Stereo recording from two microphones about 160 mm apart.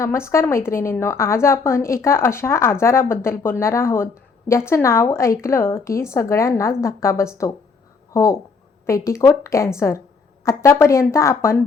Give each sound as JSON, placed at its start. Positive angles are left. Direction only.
{"t": 0.0, "sound": "a woman's voice", "side_deg": 15}